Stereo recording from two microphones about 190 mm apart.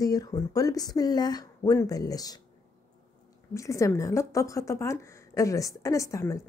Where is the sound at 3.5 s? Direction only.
15° left (ahead or behind).